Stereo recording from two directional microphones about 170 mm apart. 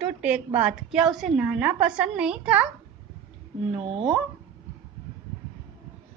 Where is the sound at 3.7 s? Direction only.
30° right (ahead or behind).